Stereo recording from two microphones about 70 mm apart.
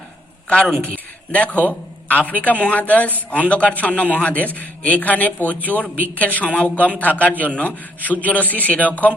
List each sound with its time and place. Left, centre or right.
0.4 s a woman's voice: centre